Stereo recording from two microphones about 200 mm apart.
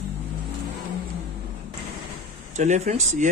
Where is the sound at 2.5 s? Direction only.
35° right (ahead or behind).